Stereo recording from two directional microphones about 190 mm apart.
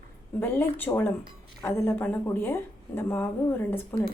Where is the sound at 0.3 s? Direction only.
10° left (ahead or behind).